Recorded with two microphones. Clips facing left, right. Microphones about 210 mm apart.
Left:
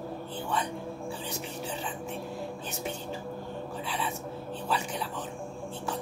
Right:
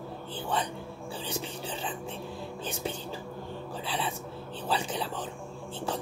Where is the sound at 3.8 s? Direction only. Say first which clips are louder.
Right 2 dB; 30° right (ahead or behind).